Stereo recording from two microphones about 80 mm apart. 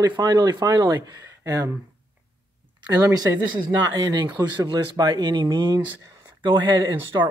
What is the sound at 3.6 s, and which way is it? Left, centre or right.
Speech, right.